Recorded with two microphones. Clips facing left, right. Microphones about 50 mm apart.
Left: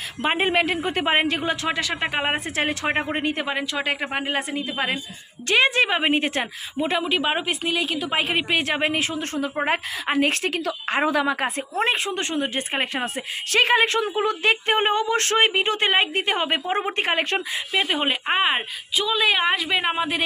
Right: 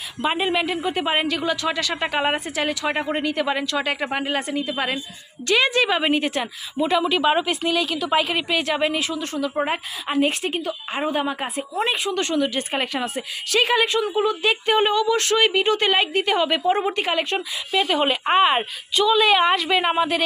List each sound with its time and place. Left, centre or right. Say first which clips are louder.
0.2 s a woman's voice: left 1 dB; left
1.4 s speech: right 1 dB; left
2.3 s speech: even; left
3.4 s a woman's voice: right 2 dB; centre
5.5 s speech: even; left
7.1 s a woman's voice: right 3 dB; centre; by 11.6 s left
11.8 s speech: even; left
12.1 s speech: right 3 dB; left
17.7 s a woman's voice: right 3 dB; left